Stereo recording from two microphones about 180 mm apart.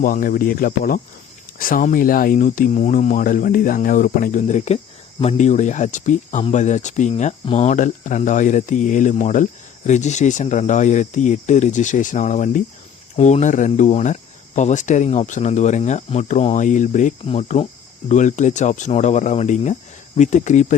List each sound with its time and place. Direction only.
0.0 s speech: 50° left (ahead or behind)